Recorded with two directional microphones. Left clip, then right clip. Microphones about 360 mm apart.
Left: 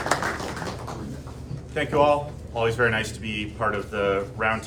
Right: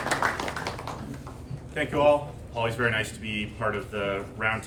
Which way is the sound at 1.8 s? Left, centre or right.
Centre.